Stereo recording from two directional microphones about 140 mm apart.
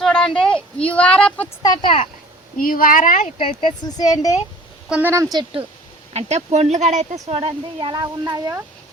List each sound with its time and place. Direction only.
0.0 s a sound: 5° left (ahead or behind)
0.9 s a woman's voice: 10° left (ahead or behind)
1.6 s speech: 35° left (ahead or behind)
2.6 s speech: 85° left; by 3.3 s 65° left (ahead or behind)
3.3 s speech: 35° left (ahead or behind)
4.9 s a woman's voice: 10° right (ahead or behind)
5.1 s a woman's voice: 25° right (ahead or behind)
6.1 s speech: 50° right (ahead or behind); by 8.6 s 25° right (ahead or behind)